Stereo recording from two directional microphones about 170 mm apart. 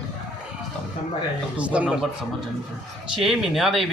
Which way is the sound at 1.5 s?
10° right (ahead or behind).